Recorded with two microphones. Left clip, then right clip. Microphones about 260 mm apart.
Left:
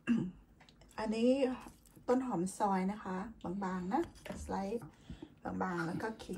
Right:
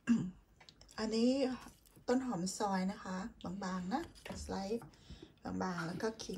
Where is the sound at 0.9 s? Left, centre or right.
Right.